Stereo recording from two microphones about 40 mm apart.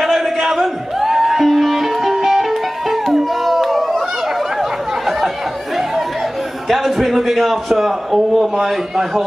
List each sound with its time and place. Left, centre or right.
0.0 s music: centre
4.6 s a sound: centre
6.7 s a man's voice: centre